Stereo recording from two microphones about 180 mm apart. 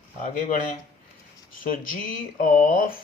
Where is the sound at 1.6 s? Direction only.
50° left (ahead or behind).